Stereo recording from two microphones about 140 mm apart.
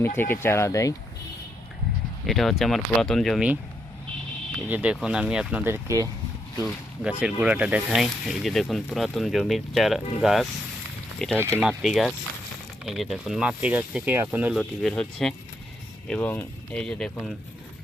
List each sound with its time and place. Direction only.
0.0 s speech: 15° left (ahead or behind)
2.2 s speech: centre (ahead or behind)
4.7 s speech: 10° right (ahead or behind)
7.0 s speech: 5° right (ahead or behind)
11.3 s speech: 15° right (ahead or behind)
11.8 s speech: centre (ahead or behind)
14.5 s speech: centre (ahead or behind)